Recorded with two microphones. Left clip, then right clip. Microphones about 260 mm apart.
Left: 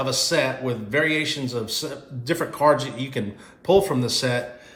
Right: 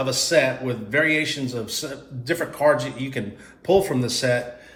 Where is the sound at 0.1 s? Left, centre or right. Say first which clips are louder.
Right 4 dB; centre.